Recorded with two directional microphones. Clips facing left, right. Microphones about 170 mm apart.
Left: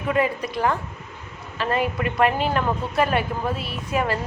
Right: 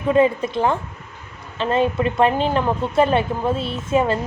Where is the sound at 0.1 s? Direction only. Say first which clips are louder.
Right 6 dB; 25° right (ahead or behind).